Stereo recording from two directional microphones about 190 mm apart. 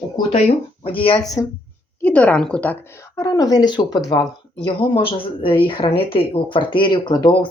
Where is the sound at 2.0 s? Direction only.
5° left (ahead or behind).